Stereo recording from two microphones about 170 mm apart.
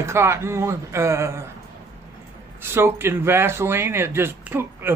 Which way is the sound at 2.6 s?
15° right (ahead or behind).